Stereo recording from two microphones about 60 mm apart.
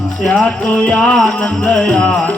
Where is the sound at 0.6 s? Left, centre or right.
Centre.